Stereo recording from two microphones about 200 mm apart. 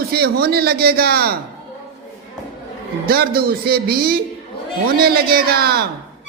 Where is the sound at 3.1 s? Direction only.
50° right (ahead or behind).